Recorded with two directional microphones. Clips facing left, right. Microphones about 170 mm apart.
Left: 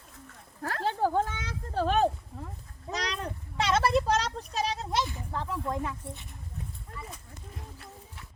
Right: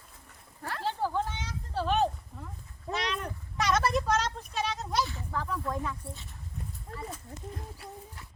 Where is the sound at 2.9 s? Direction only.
35° left (ahead or behind).